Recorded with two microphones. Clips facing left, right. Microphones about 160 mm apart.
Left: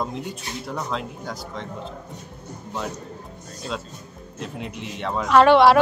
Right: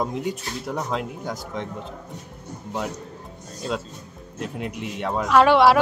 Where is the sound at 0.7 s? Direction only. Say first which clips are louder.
Right 2 dB; 15° right (ahead or behind).